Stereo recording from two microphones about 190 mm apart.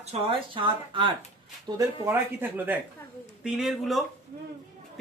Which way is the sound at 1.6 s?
15° right (ahead or behind).